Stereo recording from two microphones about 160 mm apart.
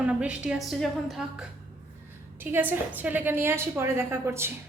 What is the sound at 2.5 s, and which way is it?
A woman's voice, 10° right (ahead or behind).